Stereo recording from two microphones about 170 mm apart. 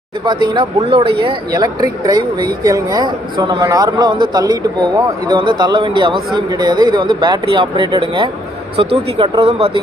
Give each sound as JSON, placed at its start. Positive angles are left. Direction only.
{"t": 0.2, "sound": "speech", "side_deg": -25}